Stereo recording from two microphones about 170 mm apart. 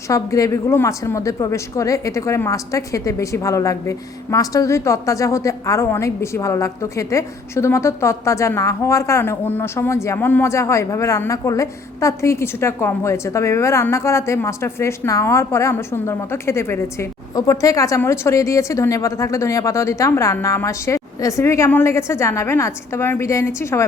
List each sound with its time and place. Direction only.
0.1 s a woman's voice: 20° left (ahead or behind)